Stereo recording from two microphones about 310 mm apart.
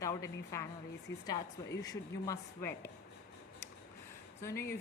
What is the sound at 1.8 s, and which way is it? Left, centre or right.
A man's voice, centre.